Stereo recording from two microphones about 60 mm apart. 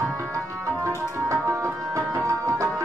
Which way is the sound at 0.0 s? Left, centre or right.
Right.